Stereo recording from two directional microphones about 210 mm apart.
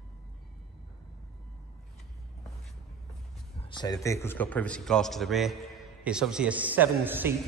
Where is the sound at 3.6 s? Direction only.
20° left (ahead or behind).